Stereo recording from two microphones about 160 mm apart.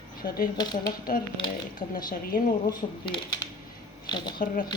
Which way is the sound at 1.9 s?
60° left (ahead or behind).